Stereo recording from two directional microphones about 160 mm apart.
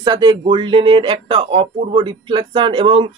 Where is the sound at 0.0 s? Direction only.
25° right (ahead or behind).